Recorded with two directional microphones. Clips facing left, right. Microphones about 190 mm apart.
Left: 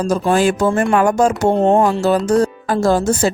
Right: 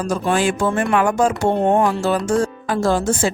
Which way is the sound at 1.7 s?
30° left (ahead or behind).